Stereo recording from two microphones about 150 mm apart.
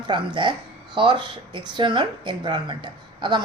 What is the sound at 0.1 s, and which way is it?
Speech, 30° right (ahead or behind).